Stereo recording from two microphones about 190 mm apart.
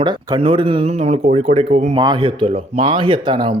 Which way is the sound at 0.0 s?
25° right (ahead or behind).